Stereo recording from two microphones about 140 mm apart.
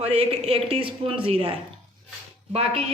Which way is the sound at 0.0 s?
45° right (ahead or behind).